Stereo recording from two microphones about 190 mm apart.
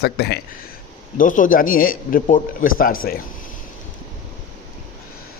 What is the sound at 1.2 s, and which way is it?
Speech, 45° left (ahead or behind).